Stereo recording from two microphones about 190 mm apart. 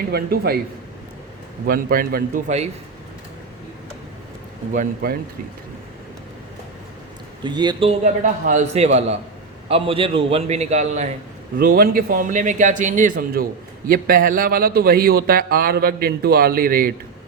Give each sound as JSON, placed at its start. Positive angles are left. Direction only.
{"t": 0.1, "sound": "speech", "side_deg": -55}
{"t": 1.6, "sound": "speech", "side_deg": -50}
{"t": 4.7, "sound": "speech", "side_deg": -45}
{"t": 7.4, "sound": "a man's voice", "side_deg": -25}
{"t": 11.6, "sound": "speech", "side_deg": -50}